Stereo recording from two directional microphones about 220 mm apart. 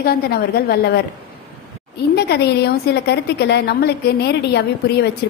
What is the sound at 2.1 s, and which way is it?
A woman's voice, 50° left (ahead or behind).